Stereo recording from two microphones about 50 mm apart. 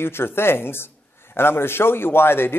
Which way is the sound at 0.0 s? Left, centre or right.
Left.